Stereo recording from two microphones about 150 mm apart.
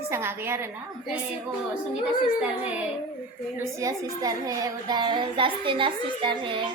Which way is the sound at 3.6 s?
20° right (ahead or behind).